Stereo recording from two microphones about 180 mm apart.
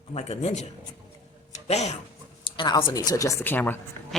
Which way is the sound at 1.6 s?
35° left (ahead or behind).